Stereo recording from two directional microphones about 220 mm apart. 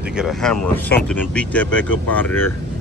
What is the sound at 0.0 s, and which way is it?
Speech, 5° right (ahead or behind).